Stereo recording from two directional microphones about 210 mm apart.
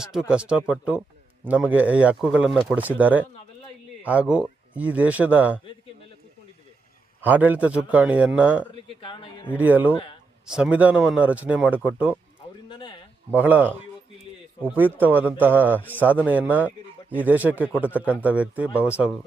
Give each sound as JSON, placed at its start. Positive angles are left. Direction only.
{"t": 0.0, "sound": "a man's voice", "side_deg": -5}
{"t": 7.2, "sound": "a man's voice", "side_deg": -10}
{"t": 8.7, "sound": "speech", "side_deg": 25}
{"t": 9.6, "sound": "a man's voice", "side_deg": -10}
{"t": 12.6, "sound": "a sound", "side_deg": 25}
{"t": 13.3, "sound": "a man's voice", "side_deg": -10}